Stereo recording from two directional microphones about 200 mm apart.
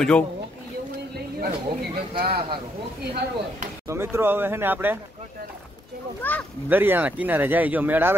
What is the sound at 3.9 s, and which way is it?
Speech, 15° right (ahead or behind).